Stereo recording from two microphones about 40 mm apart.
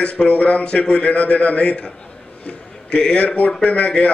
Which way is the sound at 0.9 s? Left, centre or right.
Left.